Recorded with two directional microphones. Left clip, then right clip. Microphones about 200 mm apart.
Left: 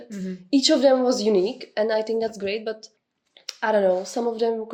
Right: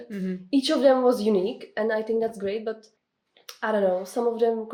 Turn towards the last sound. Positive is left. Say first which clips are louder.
# even
turn(degrees=40)  # may be behind; listen again after turning